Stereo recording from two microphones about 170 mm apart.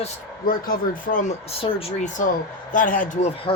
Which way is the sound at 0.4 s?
60° left (ahead or behind).